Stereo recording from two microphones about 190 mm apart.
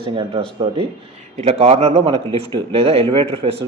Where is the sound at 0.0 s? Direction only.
25° right (ahead or behind).